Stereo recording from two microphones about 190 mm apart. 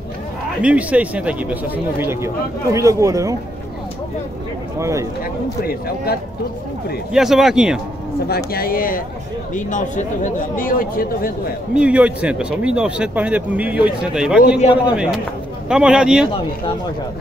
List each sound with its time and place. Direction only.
0.6 s speech: 5° right (ahead or behind)
4.7 s speech: 15° right (ahead or behind)
5.7 s speech: 55° left (ahead or behind)
7.1 s speech: centre (ahead or behind)
8.5 s speech: 50° left (ahead or behind)
11.7 s speech: 5° right (ahead or behind)